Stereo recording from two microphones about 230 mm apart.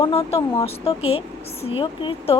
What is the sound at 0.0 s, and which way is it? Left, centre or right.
A woman's voice, left.